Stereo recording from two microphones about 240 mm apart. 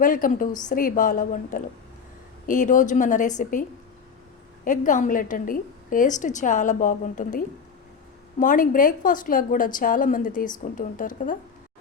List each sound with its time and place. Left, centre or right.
0.0 s a woman's voice: left